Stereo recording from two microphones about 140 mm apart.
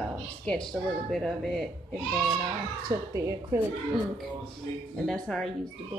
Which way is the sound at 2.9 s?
25° right (ahead or behind).